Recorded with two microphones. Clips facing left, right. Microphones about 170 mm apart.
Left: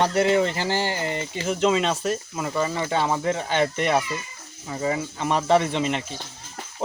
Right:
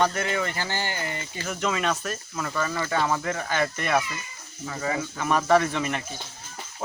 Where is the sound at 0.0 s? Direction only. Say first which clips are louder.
Left 5 dB; 25° left (ahead or behind).